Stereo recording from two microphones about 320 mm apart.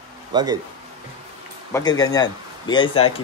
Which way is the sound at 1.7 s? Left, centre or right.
Centre.